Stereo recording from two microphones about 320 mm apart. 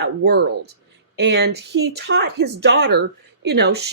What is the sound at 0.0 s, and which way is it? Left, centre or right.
Speech, right.